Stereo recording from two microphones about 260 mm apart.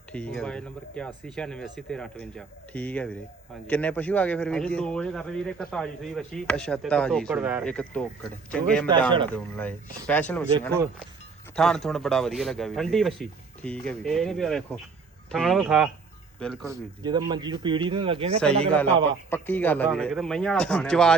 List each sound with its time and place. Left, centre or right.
0.1 s a man's voice: centre
16.6 s a man's voice: centre
18.3 s a man's voice: centre